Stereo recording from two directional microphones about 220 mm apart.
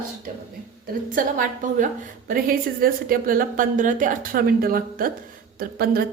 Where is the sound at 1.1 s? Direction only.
35° right (ahead or behind).